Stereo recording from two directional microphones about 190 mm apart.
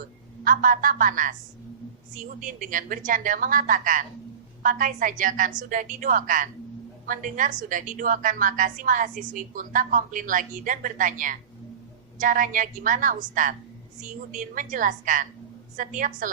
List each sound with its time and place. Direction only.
0.4 s a woman's voice: 45° right (ahead or behind)